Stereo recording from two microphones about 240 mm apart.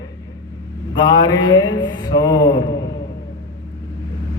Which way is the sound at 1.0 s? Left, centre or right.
Centre.